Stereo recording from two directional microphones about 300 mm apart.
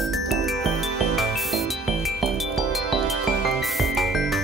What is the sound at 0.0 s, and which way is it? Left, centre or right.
Music, centre.